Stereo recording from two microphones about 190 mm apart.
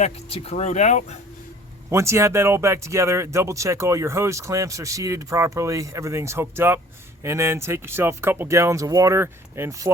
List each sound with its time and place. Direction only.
0.0 s speech: 30° left (ahead or behind)
1.9 s speech: 15° right (ahead or behind)